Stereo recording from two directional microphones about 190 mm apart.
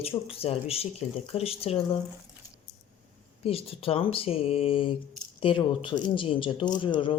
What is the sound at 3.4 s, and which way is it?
Speech, 30° left (ahead or behind).